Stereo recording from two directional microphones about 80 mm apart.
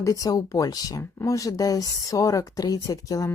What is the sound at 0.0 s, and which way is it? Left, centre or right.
Speech, left.